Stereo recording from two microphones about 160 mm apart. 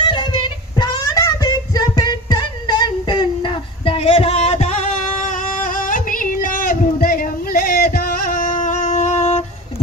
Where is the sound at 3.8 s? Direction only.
35° left (ahead or behind).